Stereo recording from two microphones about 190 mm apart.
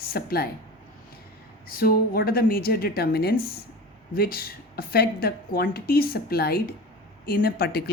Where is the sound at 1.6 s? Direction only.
50° left (ahead or behind).